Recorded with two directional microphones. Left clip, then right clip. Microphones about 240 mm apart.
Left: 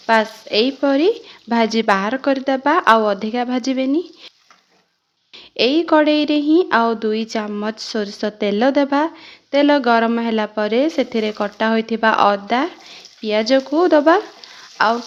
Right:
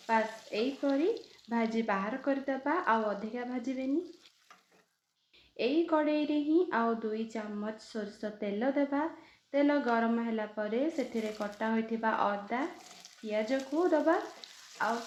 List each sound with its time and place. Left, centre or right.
0.0 s speech: left
5.5 s speech: left
14.8 s frying: left